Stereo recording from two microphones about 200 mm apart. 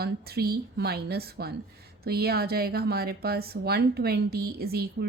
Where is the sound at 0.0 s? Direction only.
50° right (ahead or behind).